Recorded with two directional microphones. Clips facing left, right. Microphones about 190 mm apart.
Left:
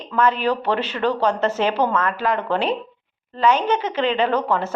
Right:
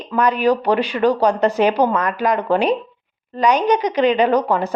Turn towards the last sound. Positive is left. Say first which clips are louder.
# right 4 dB
turn(degrees=-15)  # may be behind; listen again after turning